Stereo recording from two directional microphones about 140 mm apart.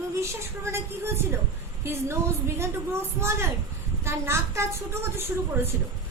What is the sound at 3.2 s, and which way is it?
A woman's voice, 20° right (ahead or behind).